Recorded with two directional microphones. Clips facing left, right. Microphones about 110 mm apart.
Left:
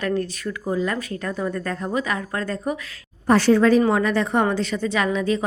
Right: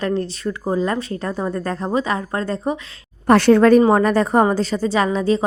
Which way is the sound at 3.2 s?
60° right (ahead or behind).